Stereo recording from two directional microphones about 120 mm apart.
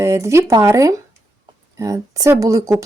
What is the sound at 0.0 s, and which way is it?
Speech, 25° right (ahead or behind).